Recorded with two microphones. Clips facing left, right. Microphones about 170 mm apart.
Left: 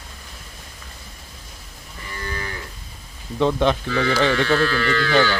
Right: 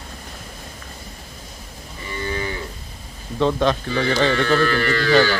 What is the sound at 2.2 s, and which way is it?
Moo, 25° right (ahead or behind).